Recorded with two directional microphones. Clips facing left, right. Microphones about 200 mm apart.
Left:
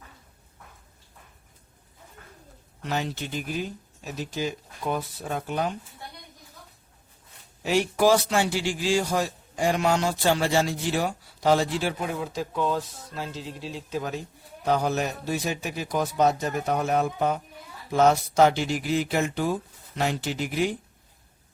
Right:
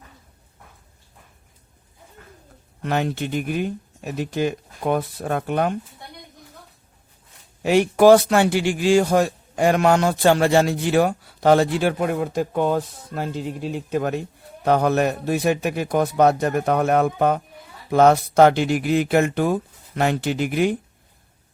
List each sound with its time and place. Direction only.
2.8 s a man's voice: 55° right (ahead or behind)
7.6 s a man's voice: 60° right (ahead or behind)